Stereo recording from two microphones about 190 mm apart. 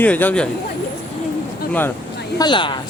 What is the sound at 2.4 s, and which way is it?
Speech, 25° left (ahead or behind).